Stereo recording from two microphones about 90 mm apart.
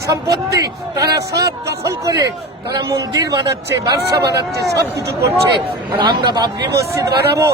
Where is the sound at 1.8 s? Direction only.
35° right (ahead or behind).